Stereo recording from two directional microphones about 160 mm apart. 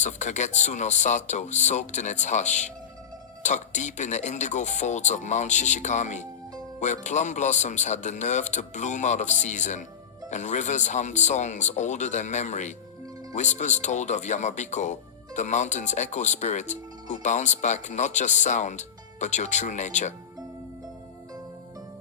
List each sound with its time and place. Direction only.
0.0 s speech: 45° left (ahead or behind)